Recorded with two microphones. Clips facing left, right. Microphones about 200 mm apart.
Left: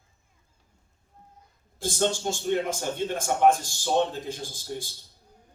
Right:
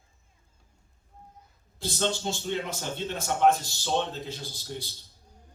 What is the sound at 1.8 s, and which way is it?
A man's voice, 50° left (ahead or behind).